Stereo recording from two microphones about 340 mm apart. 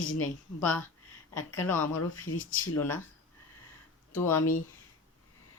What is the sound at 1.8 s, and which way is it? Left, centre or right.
Speech, left.